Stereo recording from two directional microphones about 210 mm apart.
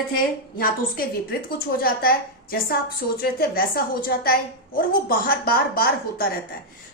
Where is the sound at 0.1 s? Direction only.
45° left (ahead or behind).